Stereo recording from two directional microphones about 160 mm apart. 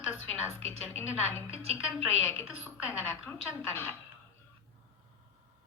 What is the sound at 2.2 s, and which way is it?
A woman's voice, 15° left (ahead or behind).